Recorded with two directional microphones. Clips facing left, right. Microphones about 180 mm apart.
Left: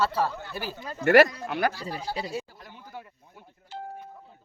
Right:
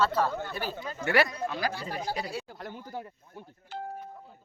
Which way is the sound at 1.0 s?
45° left (ahead or behind).